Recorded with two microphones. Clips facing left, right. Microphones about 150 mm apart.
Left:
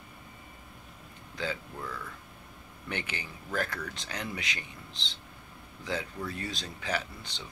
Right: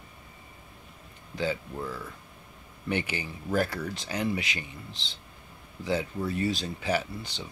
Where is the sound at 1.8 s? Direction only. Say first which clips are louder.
Right 4 dB; 20° right (ahead or behind).